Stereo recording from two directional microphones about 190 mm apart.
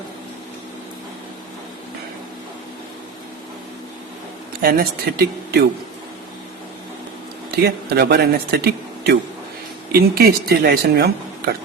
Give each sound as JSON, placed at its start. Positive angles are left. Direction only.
{"t": 4.6, "sound": "speech", "side_deg": -55}
{"t": 7.6, "sound": "speech", "side_deg": -55}